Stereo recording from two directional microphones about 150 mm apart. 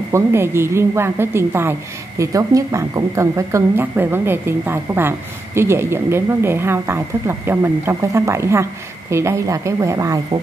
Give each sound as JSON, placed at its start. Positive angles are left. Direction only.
{"t": 0.1, "sound": "a woman's voice", "side_deg": -15}